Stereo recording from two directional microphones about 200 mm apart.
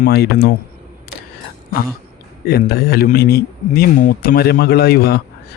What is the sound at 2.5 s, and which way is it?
A man's voice, 50° left (ahead or behind).